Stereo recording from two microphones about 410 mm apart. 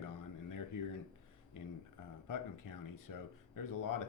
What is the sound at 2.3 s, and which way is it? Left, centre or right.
Speech, left.